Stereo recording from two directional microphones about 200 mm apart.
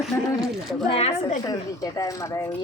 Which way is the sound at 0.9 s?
30° left (ahead or behind).